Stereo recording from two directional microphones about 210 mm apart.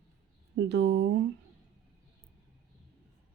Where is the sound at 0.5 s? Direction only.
55° right (ahead or behind).